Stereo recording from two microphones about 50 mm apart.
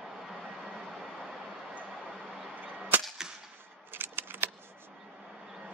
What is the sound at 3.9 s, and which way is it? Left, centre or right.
Typewriter, right.